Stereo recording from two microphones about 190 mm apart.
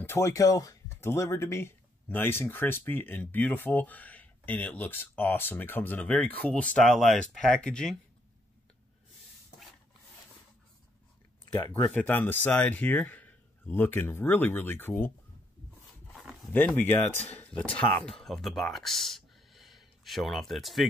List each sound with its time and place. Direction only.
0.0 s speech: 15° left (ahead or behind)
11.9 s speech: 10° left (ahead or behind)
16.5 s speech: 10° left (ahead or behind)